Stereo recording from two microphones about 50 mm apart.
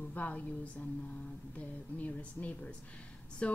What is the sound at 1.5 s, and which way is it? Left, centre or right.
A woman's voice, left.